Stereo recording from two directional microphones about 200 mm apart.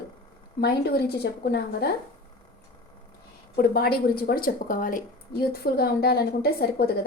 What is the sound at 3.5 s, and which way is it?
A woman's voice, 50° left (ahead or behind).